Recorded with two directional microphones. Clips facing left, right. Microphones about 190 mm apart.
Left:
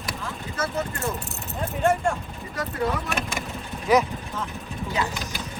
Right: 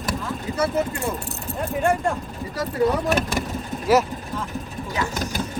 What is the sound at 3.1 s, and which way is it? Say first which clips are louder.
Speech: right 7 dB; 40° right (ahead or behind).